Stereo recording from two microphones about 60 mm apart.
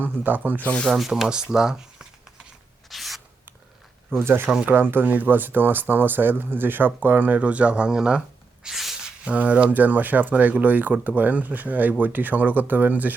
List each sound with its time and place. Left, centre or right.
0.0 s speech: right
0.9 s speech: centre
2.9 s rub: centre
4.1 s speech: right
4.4 s speech: right
8.6 s a sound: centre; by 9.6 s right
9.7 s speech: right